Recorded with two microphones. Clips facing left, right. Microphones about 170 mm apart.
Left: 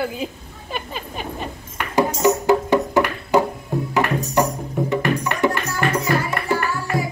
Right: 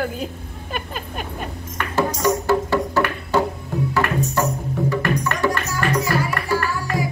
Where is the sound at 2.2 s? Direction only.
15° left (ahead or behind).